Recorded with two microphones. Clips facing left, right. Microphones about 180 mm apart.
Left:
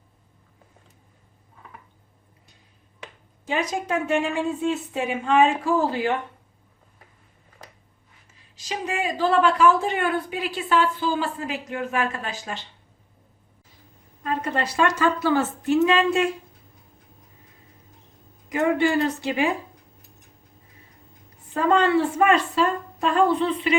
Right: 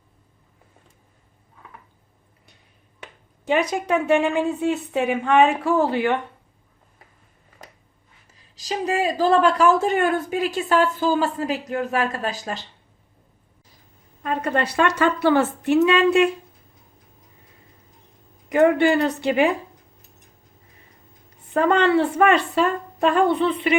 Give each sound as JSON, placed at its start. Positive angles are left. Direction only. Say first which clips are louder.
{"t": 3.4, "sound": "a woman's voice", "louder": "right 5 dB", "side_deg": -65}
{"t": 8.3, "sound": "a woman's voice", "louder": "right 4 dB", "side_deg": -35}
{"t": 14.3, "sound": "a woman's voice", "louder": "right 3 dB", "side_deg": -60}
{"t": 18.4, "sound": "a woman's voice", "louder": "right 5 dB", "side_deg": -60}
{"t": 21.5, "sound": "a woman's voice", "louder": "right 2 dB", "side_deg": -65}